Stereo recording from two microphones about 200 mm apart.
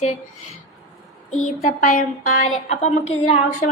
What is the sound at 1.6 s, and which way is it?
A woman's voice, 45° left (ahead or behind).